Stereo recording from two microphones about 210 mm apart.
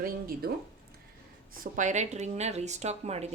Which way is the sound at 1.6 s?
40° right (ahead or behind).